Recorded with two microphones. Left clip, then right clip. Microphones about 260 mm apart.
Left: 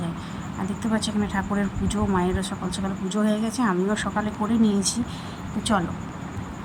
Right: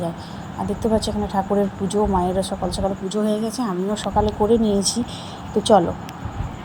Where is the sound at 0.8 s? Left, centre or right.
Centre.